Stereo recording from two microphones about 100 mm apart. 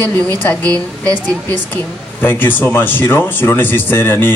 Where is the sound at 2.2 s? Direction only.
20° left (ahead or behind).